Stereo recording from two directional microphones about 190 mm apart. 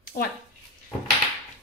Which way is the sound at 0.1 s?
55° left (ahead or behind).